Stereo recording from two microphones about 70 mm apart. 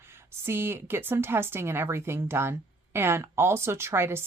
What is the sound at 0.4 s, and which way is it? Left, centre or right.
A woman's voice, right.